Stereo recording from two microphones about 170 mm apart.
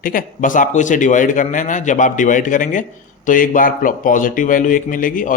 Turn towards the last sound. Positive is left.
turn(degrees=50)  # may be behind; listen again after turning